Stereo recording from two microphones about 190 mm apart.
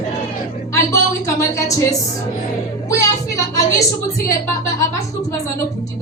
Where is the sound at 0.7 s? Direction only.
15° left (ahead or behind).